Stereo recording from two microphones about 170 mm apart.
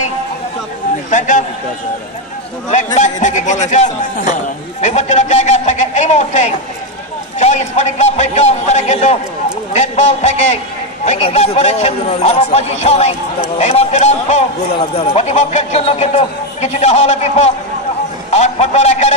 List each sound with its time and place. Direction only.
1.1 s a man's voice: 45° left (ahead or behind)
2.7 s a man's voice: 45° left (ahead or behind)